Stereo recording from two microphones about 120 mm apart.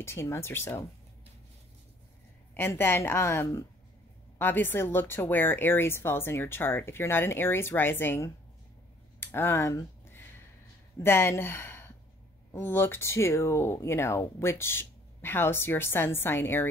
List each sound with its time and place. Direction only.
0.0 s speech: 20° left (ahead or behind)
2.5 s speech: 20° left (ahead or behind)
9.2 s a sound: 20° left (ahead or behind)
11.0 s speech: 20° left (ahead or behind)